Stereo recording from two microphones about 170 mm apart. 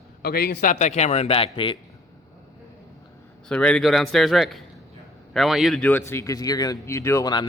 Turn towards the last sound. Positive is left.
turn(degrees=20)  # may be behind; listen again after turning